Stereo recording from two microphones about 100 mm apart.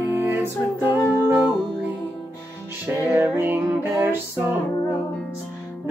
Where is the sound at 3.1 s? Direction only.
20° right (ahead or behind).